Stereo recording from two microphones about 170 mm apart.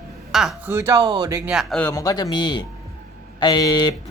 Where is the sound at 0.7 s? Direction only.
15° right (ahead or behind).